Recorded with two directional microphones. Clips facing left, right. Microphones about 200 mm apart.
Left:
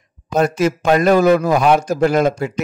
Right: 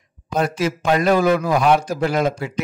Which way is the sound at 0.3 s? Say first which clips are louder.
Left 5 dB; 45° left (ahead or behind).